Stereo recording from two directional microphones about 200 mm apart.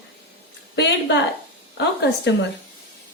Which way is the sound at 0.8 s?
60° left (ahead or behind).